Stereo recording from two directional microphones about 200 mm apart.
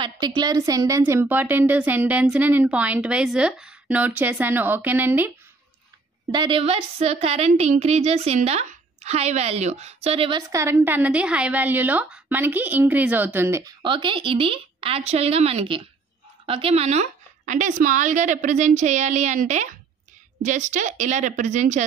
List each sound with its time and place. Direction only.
0.0 s a woman's voice: 20° right (ahead or behind)
6.3 s speech: 25° right (ahead or behind)
10.5 s a woman's voice: 15° right (ahead or behind); by 21.8 s 35° right (ahead or behind)